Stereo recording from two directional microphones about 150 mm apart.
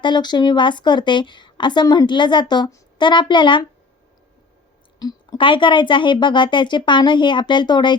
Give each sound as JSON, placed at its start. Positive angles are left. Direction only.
{"t": 0.0, "sound": "a woman's voice", "side_deg": 30}
{"t": 4.9, "sound": "a woman's voice", "side_deg": 25}